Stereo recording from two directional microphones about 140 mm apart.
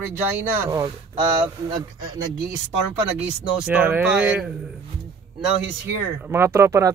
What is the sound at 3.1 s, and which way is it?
Speech, 10° right (ahead or behind).